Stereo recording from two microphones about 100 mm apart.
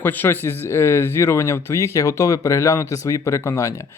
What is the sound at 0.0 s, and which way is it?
Speech, 20° left (ahead or behind).